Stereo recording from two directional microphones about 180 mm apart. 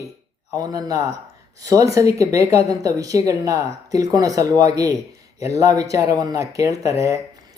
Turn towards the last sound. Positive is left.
turn(degrees=-15)  # may be behind; listen again after turning